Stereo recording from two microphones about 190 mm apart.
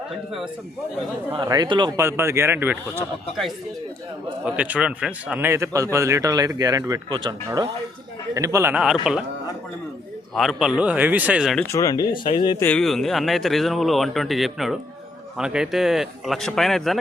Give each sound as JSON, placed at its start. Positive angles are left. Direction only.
{"t": 1.3, "sound": "speech", "side_deg": -25}
{"t": 2.0, "sound": "speech", "side_deg": -15}
{"t": 4.4, "sound": "a man's voice", "side_deg": -5}
{"t": 8.7, "sound": "speech", "side_deg": -5}
{"t": 10.3, "sound": "speech", "side_deg": 0}
{"t": 11.6, "sound": "speech", "side_deg": 15}
{"t": 12.6, "sound": "speech", "side_deg": 5}